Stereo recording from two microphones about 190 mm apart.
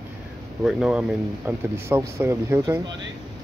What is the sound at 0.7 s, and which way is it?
Speech, 5° right (ahead or behind).